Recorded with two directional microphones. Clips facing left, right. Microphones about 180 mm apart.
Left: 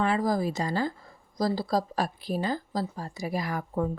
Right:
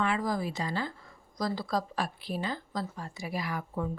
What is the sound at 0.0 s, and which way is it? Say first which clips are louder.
Speech: left 4 dB; 40° left (ahead or behind).